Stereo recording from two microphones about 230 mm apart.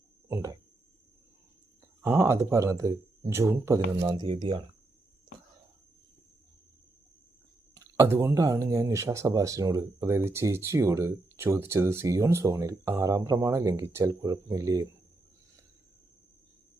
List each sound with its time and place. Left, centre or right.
0.3 s a sound: centre
2.0 s speech: centre
7.8 s speech: centre